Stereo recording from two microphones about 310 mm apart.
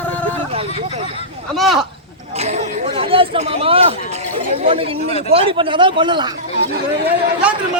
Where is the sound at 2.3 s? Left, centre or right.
Right.